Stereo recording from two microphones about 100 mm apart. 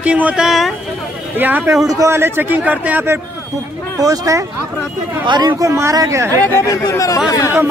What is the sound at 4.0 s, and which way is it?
Speech, 35° right (ahead or behind).